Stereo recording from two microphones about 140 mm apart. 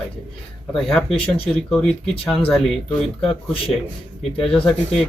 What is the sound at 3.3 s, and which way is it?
Speech, 40° left (ahead or behind).